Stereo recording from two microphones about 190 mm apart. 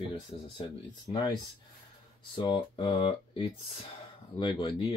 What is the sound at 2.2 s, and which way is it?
Speech, 25° left (ahead or behind).